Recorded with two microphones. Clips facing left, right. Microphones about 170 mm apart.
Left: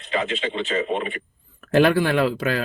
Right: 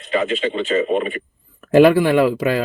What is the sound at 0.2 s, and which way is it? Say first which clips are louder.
Speech: right 5 dB; 35° right (ahead or behind).